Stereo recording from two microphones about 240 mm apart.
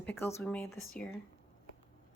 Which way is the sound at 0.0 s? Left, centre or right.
Centre.